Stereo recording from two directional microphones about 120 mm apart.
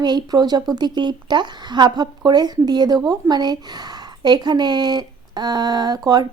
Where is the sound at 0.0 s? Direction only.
35° right (ahead or behind).